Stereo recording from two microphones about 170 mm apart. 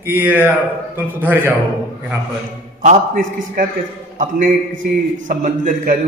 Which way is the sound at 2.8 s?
55° right (ahead or behind).